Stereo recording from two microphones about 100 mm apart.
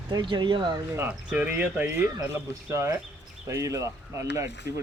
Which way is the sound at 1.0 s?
15° right (ahead or behind).